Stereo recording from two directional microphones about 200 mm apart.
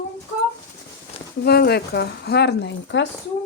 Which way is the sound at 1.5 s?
55° left (ahead or behind).